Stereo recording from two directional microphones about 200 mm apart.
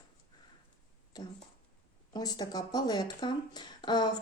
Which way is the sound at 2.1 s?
20° left (ahead or behind).